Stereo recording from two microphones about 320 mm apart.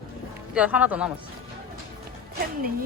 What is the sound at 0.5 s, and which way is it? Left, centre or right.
Speech, centre.